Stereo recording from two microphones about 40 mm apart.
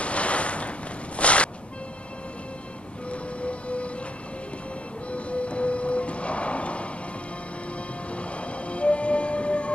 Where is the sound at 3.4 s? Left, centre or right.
Left.